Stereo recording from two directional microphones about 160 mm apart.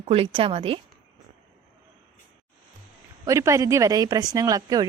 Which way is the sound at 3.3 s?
20° right (ahead or behind).